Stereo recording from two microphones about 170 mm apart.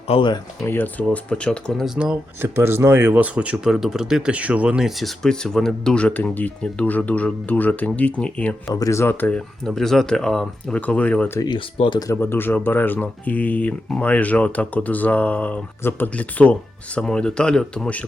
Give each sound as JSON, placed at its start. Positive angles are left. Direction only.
{"t": 0.1, "sound": "speech", "side_deg": 30}
{"t": 0.6, "sound": "speech", "side_deg": 10}
{"t": 2.0, "sound": "speech", "side_deg": -10}
{"t": 8.7, "sound": "speech", "side_deg": 20}
{"t": 11.3, "sound": "speech", "side_deg": 25}